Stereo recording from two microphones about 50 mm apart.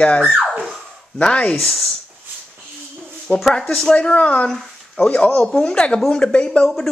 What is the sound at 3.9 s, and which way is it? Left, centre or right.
Speech, centre.